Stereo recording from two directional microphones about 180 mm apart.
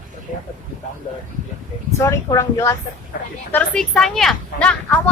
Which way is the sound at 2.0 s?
15° left (ahead or behind).